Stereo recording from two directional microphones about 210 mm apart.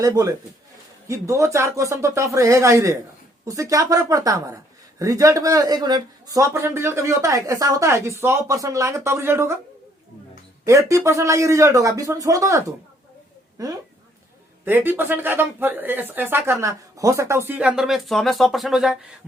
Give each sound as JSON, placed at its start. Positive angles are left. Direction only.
{"t": 0.0, "sound": "speech", "side_deg": -15}
{"t": 10.7, "sound": "speech", "side_deg": -15}